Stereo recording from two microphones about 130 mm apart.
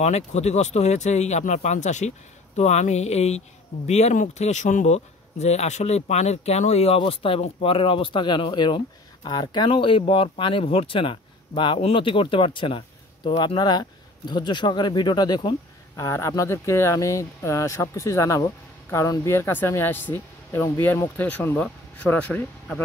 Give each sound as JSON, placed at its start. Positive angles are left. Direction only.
{"t": 0.0, "sound": "speech", "side_deg": 60}